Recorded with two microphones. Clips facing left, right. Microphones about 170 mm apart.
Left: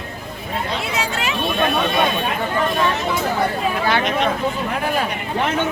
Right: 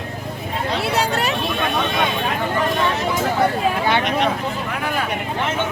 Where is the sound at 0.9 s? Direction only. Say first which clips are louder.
Right 4 dB; 35° right (ahead or behind).